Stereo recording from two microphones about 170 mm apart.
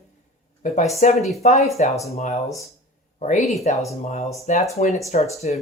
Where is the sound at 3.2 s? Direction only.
45° left (ahead or behind).